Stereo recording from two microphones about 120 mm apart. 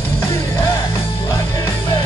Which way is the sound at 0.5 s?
30° left (ahead or behind).